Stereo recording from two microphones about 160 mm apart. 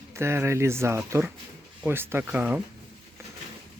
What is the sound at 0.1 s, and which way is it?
Speech, 15° right (ahead or behind).